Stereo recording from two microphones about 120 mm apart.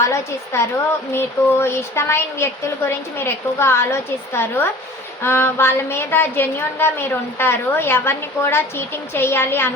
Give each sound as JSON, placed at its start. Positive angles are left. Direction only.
{"t": 0.0, "sound": "a woman's voice", "side_deg": 25}